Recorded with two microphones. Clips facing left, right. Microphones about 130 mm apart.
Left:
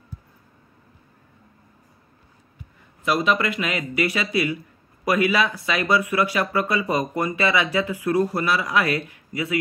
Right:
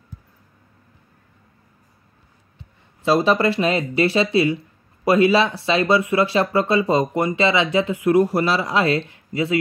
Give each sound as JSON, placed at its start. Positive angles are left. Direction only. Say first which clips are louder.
{"t": 3.0, "sound": "speech", "louder": "right 5 dB", "side_deg": -30}